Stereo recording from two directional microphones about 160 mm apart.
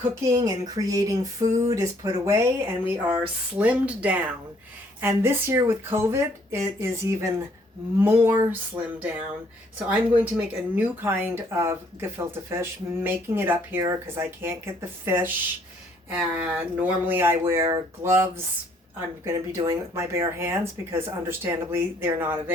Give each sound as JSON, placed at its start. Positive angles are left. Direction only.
{"t": 0.1, "sound": "speech", "side_deg": -20}
{"t": 9.7, "sound": "speech", "side_deg": -10}